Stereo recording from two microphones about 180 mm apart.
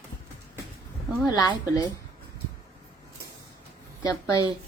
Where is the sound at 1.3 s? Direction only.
20° left (ahead or behind).